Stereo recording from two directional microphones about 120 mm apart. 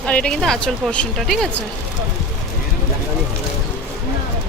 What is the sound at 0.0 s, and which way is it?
A woman's voice, 10° left (ahead or behind).